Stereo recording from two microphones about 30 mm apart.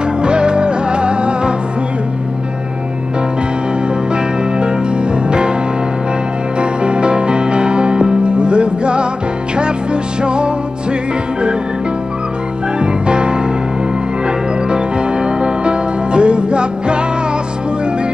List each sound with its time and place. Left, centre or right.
0.2 s music: right
4.1 s music: right
6.6 s music: right
10.2 s music: right
12.7 s music: right